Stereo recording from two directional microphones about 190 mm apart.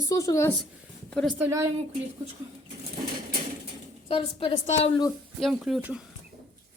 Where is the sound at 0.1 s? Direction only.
15° left (ahead or behind).